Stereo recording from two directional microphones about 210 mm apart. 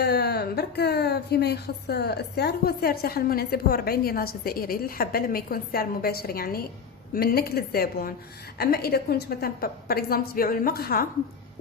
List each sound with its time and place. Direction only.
0.0 s speech: 50° left (ahead or behind)